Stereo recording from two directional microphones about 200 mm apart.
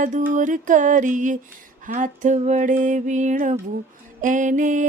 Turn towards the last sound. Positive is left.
turn(degrees=-40)  # may be behind; listen again after turning